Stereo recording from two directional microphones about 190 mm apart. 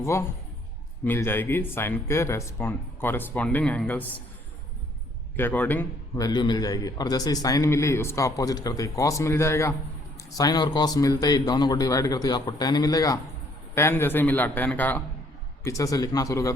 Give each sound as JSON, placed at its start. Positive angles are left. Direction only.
{"t": 0.0, "sound": "a man's voice", "side_deg": 15}
{"t": 5.4, "sound": "a man's voice", "side_deg": 10}